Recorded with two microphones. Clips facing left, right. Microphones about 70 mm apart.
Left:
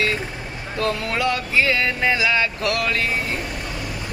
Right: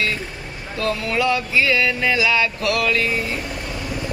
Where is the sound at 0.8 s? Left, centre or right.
Left.